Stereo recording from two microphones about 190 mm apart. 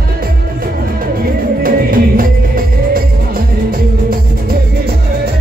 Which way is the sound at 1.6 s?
50° right (ahead or behind).